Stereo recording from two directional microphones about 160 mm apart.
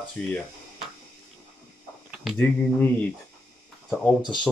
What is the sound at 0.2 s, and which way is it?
Speech, 10° left (ahead or behind).